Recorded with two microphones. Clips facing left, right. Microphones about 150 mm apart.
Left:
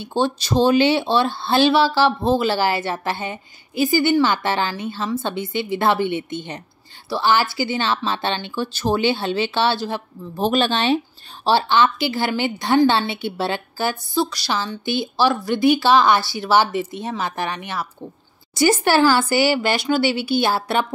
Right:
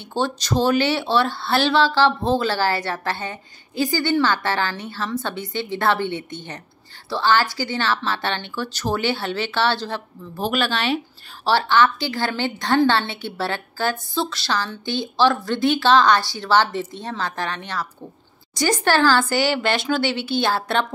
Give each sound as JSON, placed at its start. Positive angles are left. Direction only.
{"t": 0.0, "sound": "speech", "side_deg": 15}